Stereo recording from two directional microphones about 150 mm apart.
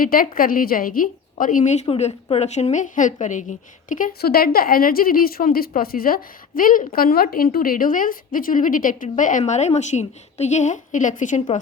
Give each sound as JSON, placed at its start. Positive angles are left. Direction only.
{"t": 0.0, "sound": "a woman's voice", "side_deg": 70}